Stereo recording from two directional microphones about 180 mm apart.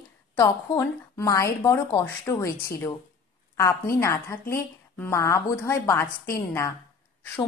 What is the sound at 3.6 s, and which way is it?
A woman's voice, 15° left (ahead or behind).